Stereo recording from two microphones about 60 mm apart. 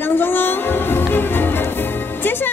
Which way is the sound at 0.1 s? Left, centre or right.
Left.